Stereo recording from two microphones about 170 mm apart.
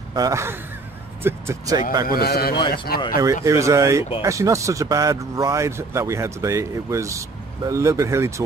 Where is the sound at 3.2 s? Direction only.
20° right (ahead or behind).